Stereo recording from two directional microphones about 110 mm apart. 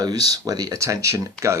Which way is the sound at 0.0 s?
35° right (ahead or behind).